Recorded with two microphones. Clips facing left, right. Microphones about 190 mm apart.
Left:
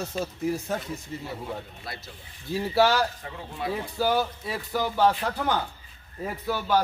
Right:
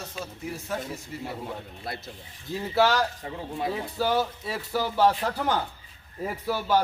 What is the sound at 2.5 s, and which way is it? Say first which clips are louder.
Speech: left 1 dB; 5° left (ahead or behind).